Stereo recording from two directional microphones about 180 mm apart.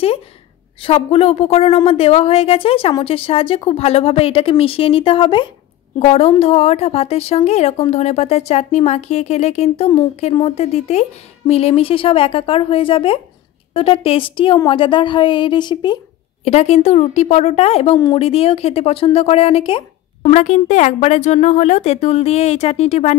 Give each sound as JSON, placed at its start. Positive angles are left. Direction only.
{"t": 0.7, "sound": "a woman's voice", "side_deg": 30}
{"t": 16.4, "sound": "a woman's voice", "side_deg": 35}